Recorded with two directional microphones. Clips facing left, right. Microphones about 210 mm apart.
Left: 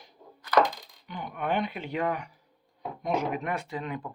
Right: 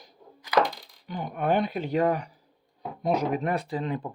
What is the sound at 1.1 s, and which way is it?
Speech, 40° right (ahead or behind).